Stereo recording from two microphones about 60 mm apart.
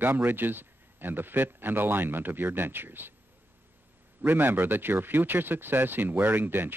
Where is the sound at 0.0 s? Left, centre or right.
Right.